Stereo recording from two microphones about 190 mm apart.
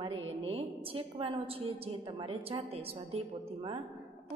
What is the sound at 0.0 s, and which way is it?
A woman's voice, 30° right (ahead or behind).